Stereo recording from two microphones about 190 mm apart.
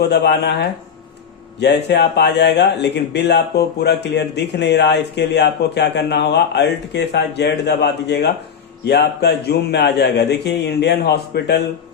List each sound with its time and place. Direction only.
0.0 s speech: 60° left (ahead or behind)